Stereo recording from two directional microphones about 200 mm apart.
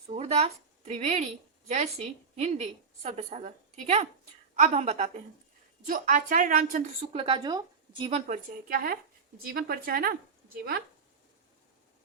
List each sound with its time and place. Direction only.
0.1 s a woman's voice: 30° right (ahead or behind)
5.8 s a woman's voice: 45° right (ahead or behind)
7.0 s a woman's voice: 30° right (ahead or behind)
8.3 s a woman's voice: 45° right (ahead or behind)